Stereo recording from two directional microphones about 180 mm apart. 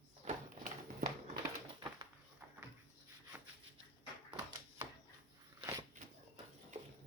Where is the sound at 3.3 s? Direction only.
10° right (ahead or behind).